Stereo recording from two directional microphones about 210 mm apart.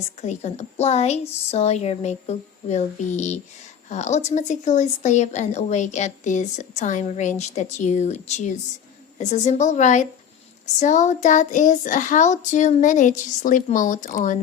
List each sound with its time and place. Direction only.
0.2 s speech: 30° left (ahead or behind)